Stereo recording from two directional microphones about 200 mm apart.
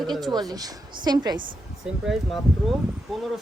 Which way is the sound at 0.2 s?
20° right (ahead or behind).